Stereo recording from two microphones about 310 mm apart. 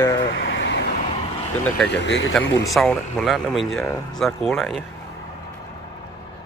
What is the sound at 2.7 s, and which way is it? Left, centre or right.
Speech, centre.